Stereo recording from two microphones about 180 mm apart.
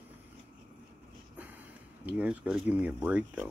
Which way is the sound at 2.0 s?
5° right (ahead or behind).